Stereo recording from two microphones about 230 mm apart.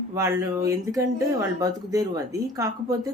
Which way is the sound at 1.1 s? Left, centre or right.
Centre.